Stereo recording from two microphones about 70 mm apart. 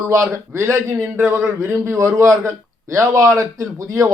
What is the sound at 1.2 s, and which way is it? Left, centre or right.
A man's voice, right.